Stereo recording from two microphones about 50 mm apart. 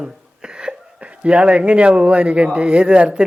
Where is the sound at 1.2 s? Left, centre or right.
Right.